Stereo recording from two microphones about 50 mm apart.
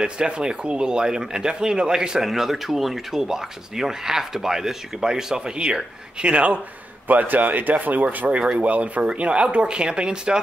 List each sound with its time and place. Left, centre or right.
0.0 s speech: centre
7.1 s speech: right; by 10.4 s centre